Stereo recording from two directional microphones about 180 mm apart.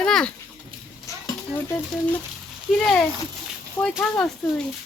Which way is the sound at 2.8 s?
Centre (ahead or behind).